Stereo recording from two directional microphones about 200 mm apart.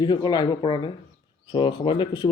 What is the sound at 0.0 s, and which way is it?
Speech, 20° left (ahead or behind).